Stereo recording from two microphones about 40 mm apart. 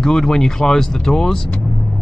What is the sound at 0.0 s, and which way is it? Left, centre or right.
Speech, centre.